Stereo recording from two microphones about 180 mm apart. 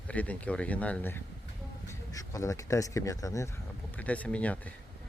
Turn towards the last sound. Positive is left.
turn(degrees=5)  # may be behind; listen again after turning